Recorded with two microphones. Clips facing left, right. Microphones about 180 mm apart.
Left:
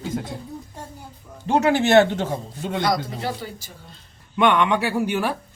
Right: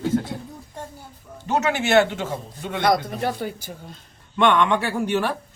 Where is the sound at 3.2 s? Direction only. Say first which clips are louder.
Right 3 dB; 55° right (ahead or behind).